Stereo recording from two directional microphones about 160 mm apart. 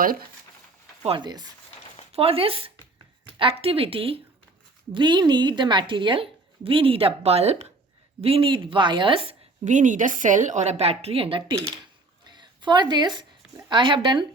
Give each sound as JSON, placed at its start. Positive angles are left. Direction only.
{"t": 1.0, "sound": "a woman's voice", "side_deg": -30}
{"t": 9.6, "sound": "a woman's voice", "side_deg": -50}
{"t": 12.2, "sound": "a sound", "side_deg": -30}
{"t": 13.7, "sound": "speech", "side_deg": -30}